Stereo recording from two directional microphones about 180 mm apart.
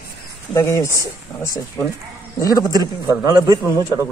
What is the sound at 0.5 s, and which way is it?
Speech, 15° left (ahead or behind).